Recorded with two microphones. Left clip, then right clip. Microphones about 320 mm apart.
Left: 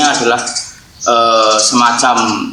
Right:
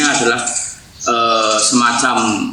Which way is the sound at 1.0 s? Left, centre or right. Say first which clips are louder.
Left 4 dB; centre.